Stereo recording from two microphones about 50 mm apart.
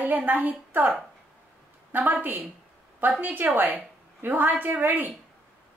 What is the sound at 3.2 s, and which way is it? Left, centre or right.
A woman's voice, right.